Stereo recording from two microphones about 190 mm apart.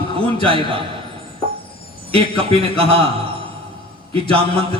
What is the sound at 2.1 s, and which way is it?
Speech, 30° right (ahead or behind).